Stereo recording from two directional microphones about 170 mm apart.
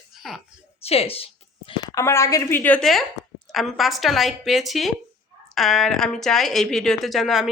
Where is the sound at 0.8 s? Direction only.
35° left (ahead or behind).